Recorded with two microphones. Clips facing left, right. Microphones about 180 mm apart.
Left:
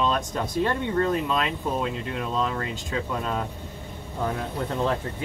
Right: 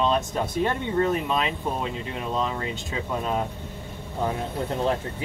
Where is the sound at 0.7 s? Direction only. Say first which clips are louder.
Even; 15° right (ahead or behind).